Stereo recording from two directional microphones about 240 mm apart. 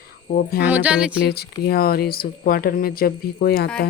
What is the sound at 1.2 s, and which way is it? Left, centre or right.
Speech, left.